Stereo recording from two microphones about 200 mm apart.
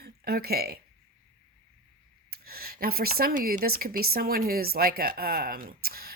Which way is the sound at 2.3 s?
50° right (ahead or behind).